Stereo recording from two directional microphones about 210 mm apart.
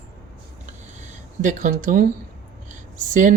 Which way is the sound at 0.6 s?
35° right (ahead or behind).